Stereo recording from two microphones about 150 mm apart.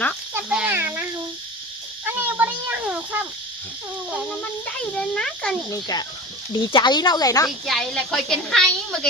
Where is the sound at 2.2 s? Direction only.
10° right (ahead or behind).